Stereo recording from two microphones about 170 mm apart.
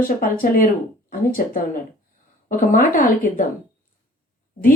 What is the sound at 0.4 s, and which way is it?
Speech, 55° left (ahead or behind).